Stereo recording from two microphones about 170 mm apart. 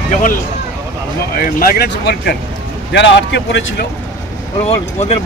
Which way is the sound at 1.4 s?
60° left (ahead or behind).